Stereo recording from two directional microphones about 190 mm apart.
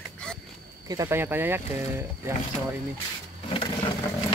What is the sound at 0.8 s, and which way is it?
Speech, 15° right (ahead or behind).